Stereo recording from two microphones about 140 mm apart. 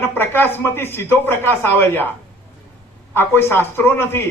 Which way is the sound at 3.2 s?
15° left (ahead or behind).